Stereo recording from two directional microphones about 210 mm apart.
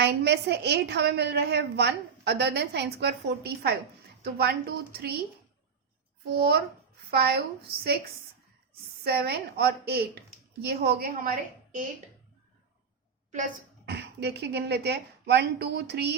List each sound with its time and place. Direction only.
0.0 s a woman's voice: 50° right (ahead or behind)
6.3 s a woman's voice: 50° right (ahead or behind)
9.0 s a woman's voice: 50° right (ahead or behind)
13.8 s a woman's voice: 50° right (ahead or behind)